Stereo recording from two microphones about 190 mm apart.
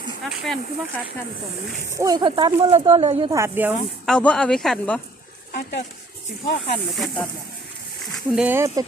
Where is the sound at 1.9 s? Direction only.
20° right (ahead or behind).